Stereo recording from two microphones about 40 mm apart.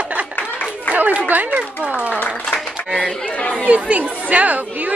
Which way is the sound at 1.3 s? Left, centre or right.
Right.